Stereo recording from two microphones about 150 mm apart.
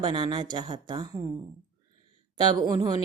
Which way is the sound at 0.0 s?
30° right (ahead or behind).